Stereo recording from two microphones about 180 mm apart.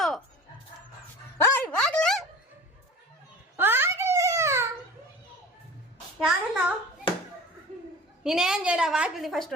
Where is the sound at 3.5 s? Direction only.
10° right (ahead or behind).